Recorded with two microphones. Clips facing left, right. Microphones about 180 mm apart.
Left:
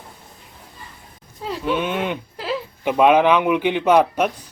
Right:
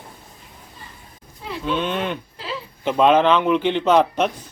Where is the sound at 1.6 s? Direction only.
10° left (ahead or behind).